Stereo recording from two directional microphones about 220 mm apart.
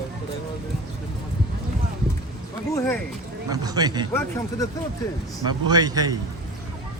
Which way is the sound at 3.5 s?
15° right (ahead or behind).